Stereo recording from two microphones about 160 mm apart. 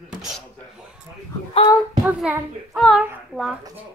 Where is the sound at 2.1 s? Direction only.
10° right (ahead or behind).